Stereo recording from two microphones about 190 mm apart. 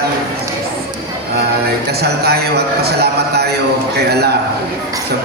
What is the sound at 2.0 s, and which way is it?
A man's voice, 55° right (ahead or behind).